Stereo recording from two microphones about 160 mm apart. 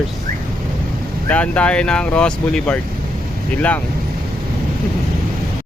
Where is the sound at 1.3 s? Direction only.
10° left (ahead or behind).